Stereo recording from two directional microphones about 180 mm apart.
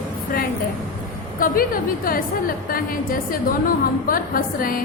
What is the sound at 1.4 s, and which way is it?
Speech, 50° left (ahead or behind).